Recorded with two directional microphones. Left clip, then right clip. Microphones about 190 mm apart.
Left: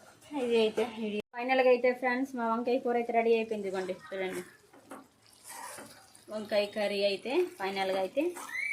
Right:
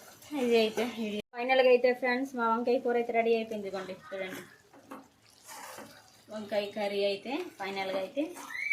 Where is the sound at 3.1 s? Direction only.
30° left (ahead or behind).